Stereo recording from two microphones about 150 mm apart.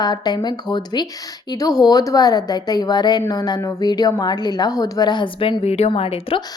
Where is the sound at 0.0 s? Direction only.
30° left (ahead or behind).